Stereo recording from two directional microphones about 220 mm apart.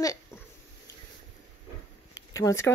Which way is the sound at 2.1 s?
15° left (ahead or behind).